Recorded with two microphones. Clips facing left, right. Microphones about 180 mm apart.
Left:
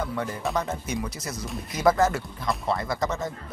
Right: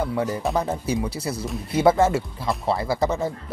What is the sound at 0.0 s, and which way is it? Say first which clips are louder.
Speech: right 5 dB; 30° right (ahead or behind).